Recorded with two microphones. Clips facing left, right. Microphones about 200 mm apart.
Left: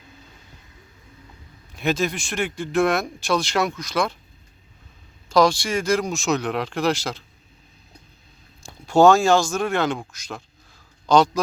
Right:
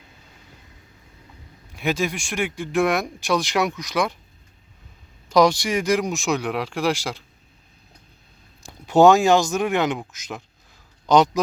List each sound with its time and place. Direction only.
1.7 s speech: 10° right (ahead or behind)
5.3 s speech: 20° right (ahead or behind)
8.9 s speech: 15° right (ahead or behind)
11.0 s a sound: 20° right (ahead or behind)